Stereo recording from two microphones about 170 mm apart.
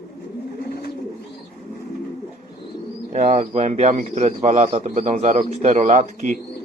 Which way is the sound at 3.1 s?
45° right (ahead or behind).